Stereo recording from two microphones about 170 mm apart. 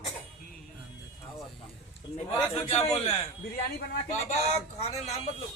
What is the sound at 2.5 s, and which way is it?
Speech, 35° left (ahead or behind).